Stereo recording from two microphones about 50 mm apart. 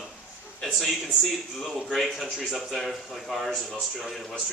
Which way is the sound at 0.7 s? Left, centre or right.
Centre.